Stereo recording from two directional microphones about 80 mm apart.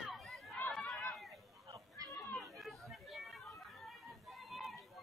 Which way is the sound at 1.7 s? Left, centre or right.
Right.